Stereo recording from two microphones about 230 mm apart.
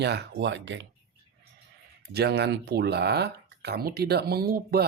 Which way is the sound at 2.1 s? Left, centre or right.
Right.